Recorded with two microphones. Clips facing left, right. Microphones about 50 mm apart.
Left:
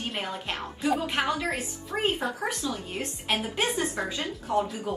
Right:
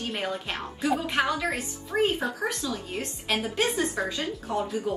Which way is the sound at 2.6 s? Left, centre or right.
Centre.